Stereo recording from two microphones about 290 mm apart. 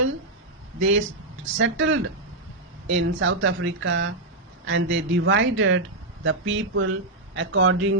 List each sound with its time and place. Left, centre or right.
0.8 s speech: right